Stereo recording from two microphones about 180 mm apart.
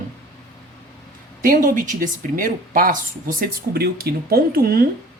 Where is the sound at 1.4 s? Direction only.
50° right (ahead or behind).